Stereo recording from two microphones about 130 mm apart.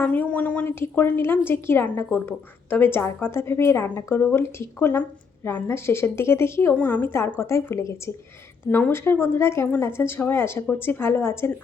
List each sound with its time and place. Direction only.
0.0 s a woman's voice: 10° left (ahead or behind)